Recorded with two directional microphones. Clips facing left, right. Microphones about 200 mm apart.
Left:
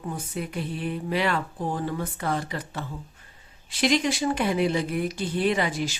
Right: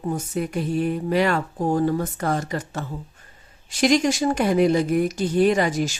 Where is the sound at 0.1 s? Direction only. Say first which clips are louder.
Right 7 dB; 45° right (ahead or behind).